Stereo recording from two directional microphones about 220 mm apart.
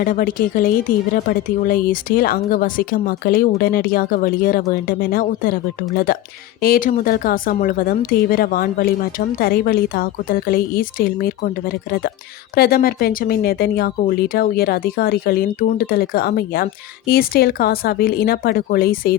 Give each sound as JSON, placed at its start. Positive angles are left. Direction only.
{"t": 0.0, "sound": "a woman's voice", "side_deg": 40}